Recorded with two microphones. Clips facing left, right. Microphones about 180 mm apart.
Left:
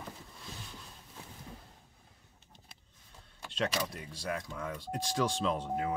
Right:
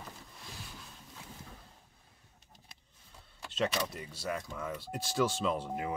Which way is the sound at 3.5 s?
Centre (ahead or behind).